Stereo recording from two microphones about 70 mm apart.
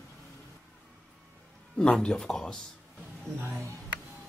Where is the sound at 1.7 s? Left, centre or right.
Centre.